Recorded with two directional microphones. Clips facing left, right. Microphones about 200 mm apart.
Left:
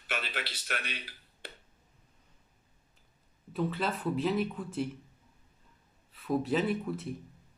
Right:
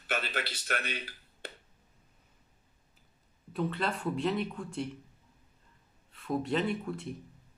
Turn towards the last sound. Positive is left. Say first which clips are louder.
# left 1 dB
turn(degrees=0)  # may be behind; listen again after turning